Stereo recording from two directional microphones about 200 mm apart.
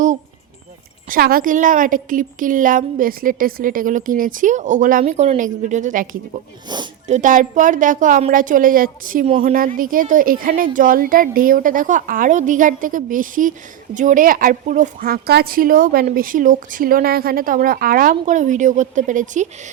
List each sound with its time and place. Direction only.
1.1 s a woman's voice: 45° right (ahead or behind)
6.7 s sniff: 20° right (ahead or behind)
7.1 s a woman's voice: 40° right (ahead or behind)